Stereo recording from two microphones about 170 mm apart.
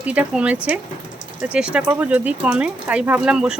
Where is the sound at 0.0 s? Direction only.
10° right (ahead or behind).